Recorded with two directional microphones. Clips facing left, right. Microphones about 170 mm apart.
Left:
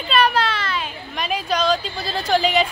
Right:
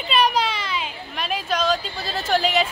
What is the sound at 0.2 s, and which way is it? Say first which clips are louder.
Children playing: left 1 dB; 15° right (ahead or behind).